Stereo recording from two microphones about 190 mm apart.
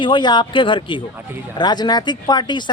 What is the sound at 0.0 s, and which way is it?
Speech, 25° left (ahead or behind).